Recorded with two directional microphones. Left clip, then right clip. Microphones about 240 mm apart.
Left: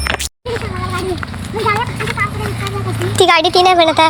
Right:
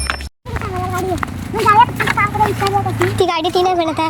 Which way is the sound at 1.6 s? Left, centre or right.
Right.